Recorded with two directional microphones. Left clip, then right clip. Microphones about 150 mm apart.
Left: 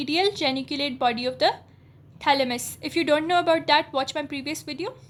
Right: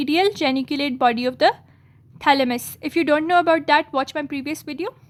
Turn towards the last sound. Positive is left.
turn(degrees=-40)  # may be behind; listen again after turning